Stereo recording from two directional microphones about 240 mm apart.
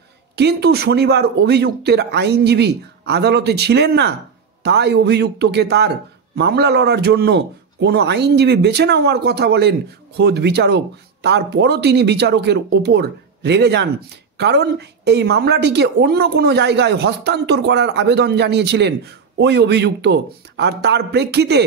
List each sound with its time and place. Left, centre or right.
0.4 s speech: right